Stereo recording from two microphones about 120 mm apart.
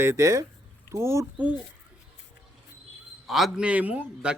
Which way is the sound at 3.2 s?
Centre (ahead or behind).